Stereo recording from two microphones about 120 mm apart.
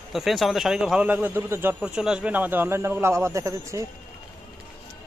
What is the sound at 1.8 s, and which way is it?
A man's voice, 5° right (ahead or behind).